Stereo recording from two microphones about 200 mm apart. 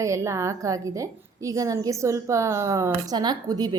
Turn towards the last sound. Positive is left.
turn(degrees=-20)  # may be behind; listen again after turning